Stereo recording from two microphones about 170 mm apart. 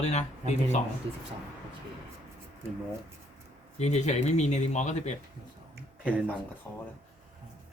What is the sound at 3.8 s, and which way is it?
Speech, 40° left (ahead or behind).